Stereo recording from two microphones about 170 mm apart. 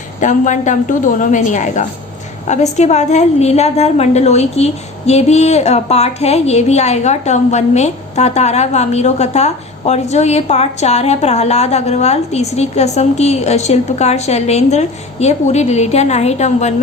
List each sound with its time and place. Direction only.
0.2 s a woman's voice: 45° left (ahead or behind)